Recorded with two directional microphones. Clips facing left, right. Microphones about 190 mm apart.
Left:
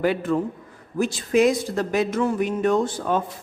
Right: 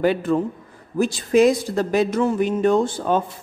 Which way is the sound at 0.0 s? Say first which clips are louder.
Right 3 dB; 30° right (ahead or behind).